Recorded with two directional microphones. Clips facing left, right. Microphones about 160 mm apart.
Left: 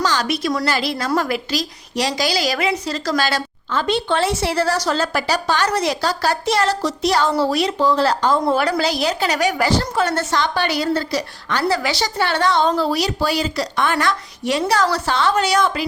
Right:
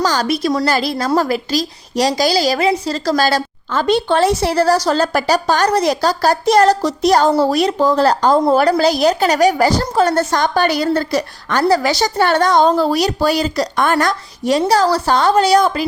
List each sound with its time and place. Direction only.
0.0 s a woman's voice: 40° right (ahead or behind)